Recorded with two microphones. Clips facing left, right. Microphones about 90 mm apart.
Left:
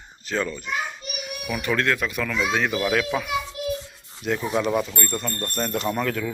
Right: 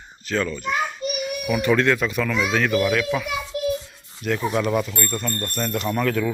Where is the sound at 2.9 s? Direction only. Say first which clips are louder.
Right 1 dB; 35° left (ahead or behind).